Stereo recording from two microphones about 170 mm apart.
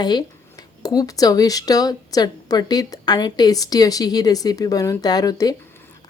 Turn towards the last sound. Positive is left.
turn(degrees=20)  # may be behind; listen again after turning